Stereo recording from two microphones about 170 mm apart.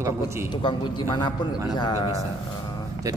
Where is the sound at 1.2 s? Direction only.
25° left (ahead or behind).